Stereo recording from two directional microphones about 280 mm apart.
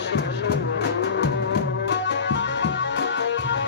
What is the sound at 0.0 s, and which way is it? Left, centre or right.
Music, left.